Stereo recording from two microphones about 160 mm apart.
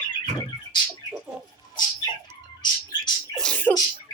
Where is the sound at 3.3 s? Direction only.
5° left (ahead or behind).